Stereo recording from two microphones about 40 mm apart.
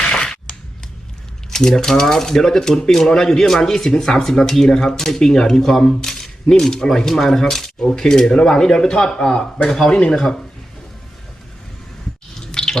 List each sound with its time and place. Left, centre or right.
0.0 s a sound: left
1.5 s speech: centre
12.5 s drip: centre